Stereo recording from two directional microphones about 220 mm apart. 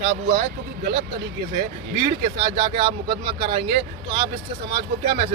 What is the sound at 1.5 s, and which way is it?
Speech, 45° right (ahead or behind).